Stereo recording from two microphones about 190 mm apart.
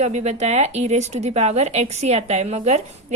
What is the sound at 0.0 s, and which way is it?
Speech, 35° right (ahead or behind).